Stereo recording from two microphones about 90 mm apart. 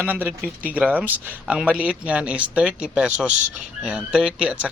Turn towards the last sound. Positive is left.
turn(degrees=-15)  # may be behind; listen again after turning